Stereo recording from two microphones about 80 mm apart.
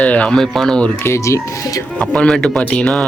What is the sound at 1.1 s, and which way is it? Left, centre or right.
Speech, left.